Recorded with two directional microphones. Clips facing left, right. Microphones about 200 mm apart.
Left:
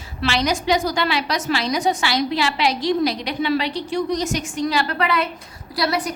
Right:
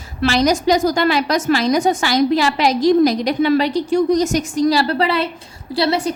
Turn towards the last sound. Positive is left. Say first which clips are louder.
# right 5 dB
turn(degrees=-25)  # may be behind; listen again after turning